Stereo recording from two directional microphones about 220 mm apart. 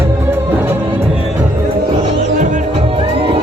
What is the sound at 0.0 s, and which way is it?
Music, 10° right (ahead or behind).